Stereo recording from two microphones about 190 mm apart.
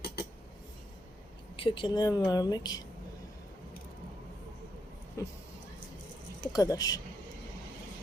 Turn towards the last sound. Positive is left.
turn(degrees=20)  # may be behind; listen again after turning